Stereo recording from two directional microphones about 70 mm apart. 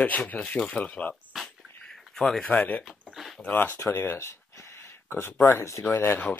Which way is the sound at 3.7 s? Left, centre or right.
Left.